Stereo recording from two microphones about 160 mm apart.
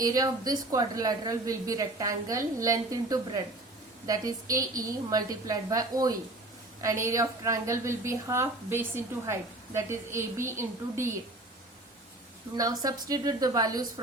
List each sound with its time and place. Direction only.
0.0 s a woman's voice: 25° right (ahead or behind)
12.5 s a woman's voice: 25° right (ahead or behind)